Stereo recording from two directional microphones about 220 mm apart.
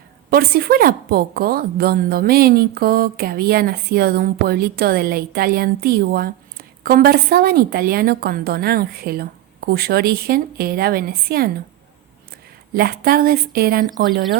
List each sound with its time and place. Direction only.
0.3 s a woman's voice: 45° right (ahead or behind)
12.7 s a woman's voice: 45° right (ahead or behind)